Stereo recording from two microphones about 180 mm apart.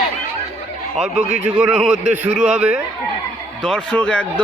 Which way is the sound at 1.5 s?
5° right (ahead or behind).